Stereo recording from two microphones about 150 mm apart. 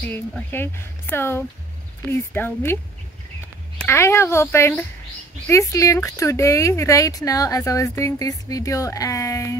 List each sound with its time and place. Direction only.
0.1 s speech: 10° left (ahead or behind)